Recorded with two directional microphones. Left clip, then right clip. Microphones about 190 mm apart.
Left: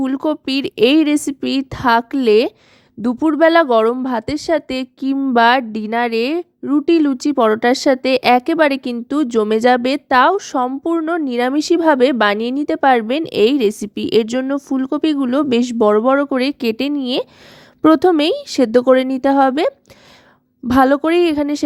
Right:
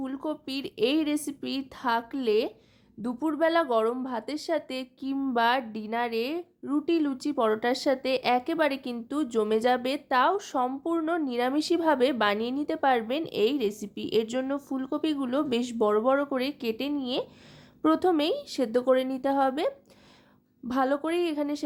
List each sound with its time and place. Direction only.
0.0 s a woman's voice: 40° left (ahead or behind)